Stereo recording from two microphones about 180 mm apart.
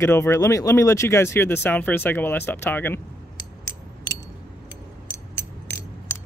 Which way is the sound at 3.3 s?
20° left (ahead or behind).